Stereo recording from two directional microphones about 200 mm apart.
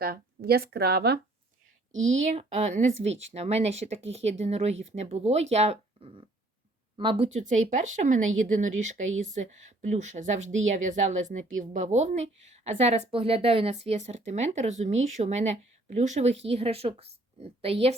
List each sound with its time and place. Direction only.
0.0 s speech: 50° right (ahead or behind)
1.9 s speech: 75° right (ahead or behind)
2.2 s a woman's voice: 35° right (ahead or behind)
7.3 s a woman's voice: 35° right (ahead or behind)
10.4 s a woman's voice: 75° right (ahead or behind)
10.8 s a woman's voice: 40° right (ahead or behind)